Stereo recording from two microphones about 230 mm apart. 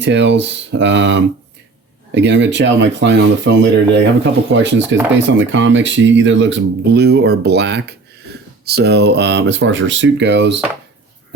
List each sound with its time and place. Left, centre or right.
0.0 s speech: right